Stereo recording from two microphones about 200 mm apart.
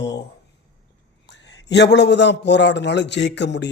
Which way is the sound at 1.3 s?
60° left (ahead or behind).